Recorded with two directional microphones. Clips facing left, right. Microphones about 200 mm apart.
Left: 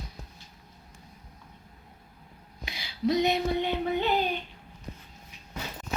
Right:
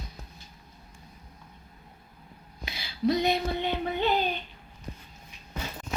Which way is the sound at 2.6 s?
15° left (ahead or behind).